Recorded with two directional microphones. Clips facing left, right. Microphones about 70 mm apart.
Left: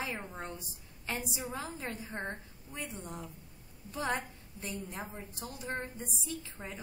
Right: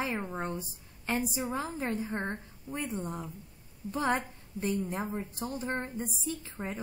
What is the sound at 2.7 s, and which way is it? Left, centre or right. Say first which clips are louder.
A woman's voice: right 7 dB; right.